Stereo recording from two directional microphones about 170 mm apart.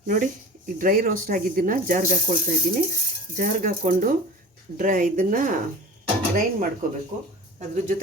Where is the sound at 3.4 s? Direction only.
55° right (ahead or behind).